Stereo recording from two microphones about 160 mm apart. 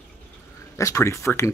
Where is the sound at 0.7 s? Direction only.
20° left (ahead or behind).